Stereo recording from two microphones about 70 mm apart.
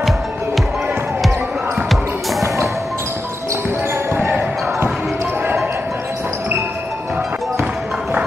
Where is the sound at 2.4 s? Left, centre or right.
Right.